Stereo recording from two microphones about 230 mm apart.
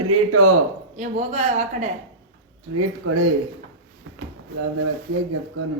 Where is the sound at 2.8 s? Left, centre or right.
Right.